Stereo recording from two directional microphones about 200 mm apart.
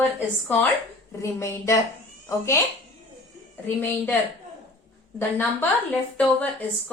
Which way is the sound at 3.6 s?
10° left (ahead or behind).